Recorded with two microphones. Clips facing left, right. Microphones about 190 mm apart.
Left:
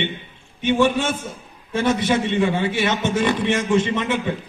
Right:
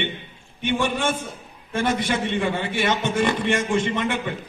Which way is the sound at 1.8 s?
55° right (ahead or behind).